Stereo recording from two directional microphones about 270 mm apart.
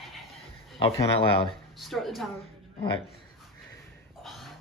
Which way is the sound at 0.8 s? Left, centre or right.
Centre.